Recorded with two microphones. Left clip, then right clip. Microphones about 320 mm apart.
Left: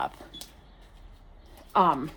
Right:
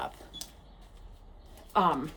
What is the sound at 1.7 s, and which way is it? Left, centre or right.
Speech, centre.